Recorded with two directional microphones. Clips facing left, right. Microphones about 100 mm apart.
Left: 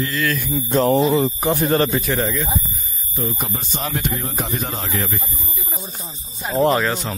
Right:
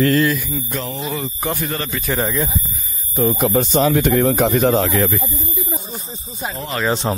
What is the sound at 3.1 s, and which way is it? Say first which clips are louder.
Speech: right 9 dB; 60° right (ahead or behind).